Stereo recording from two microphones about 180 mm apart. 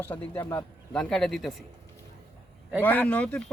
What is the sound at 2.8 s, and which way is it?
Speech, 10° left (ahead or behind).